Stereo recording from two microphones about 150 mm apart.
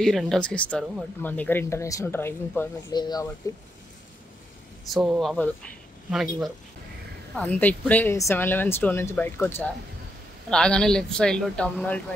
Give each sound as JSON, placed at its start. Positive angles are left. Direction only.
{"t": 0.0, "sound": "a woman's voice", "side_deg": 0}
{"t": 2.9, "sound": "speech", "side_deg": 25}
{"t": 4.8, "sound": "speech", "side_deg": 0}
{"t": 7.3, "sound": "a woman's voice", "side_deg": 10}